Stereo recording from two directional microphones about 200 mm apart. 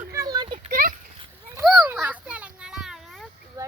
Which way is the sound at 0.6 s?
45° right (ahead or behind).